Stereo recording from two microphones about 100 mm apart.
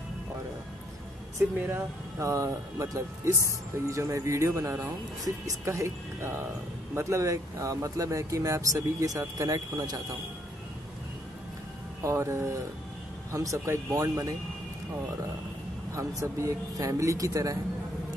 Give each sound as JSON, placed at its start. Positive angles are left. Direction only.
{"t": 1.4, "sound": "speech", "side_deg": -20}
{"t": 2.1, "sound": "speech", "side_deg": -30}
{"t": 12.0, "sound": "speech", "side_deg": -30}
{"t": 15.9, "sound": "speech", "side_deg": -30}